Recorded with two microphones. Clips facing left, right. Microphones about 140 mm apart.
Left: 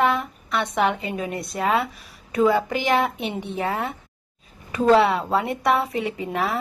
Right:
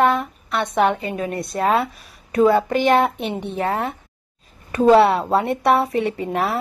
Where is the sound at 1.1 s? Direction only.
15° left (ahead or behind).